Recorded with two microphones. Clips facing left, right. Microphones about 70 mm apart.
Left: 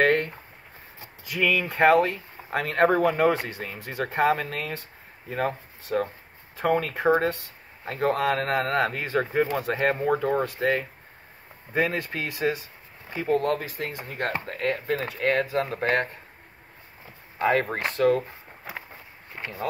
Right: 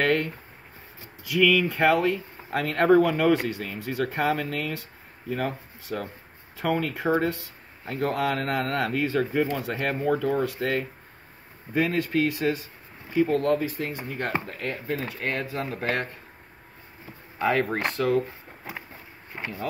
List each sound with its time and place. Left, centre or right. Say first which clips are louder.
0.0 s speech: left 2 dB; left
13.5 s speech: right 3 dB; left
15.3 s speech: left 5 dB; left
17.6 s speech: right 2 dB; centre
19.3 s speech: right 1 dB; centre